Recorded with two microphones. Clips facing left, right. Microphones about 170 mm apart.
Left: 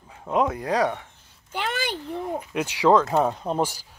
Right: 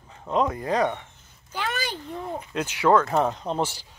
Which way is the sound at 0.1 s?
5° left (ahead or behind).